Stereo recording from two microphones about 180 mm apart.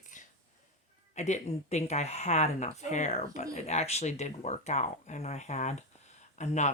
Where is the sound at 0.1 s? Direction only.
45° left (ahead or behind).